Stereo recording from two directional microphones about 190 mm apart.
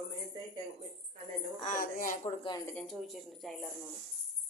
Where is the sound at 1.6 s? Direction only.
45° left (ahead or behind).